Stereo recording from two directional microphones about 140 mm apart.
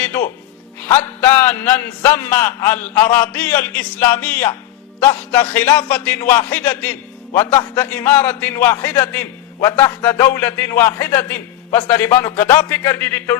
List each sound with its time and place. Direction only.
0.0 s a man's voice: 15° left (ahead or behind)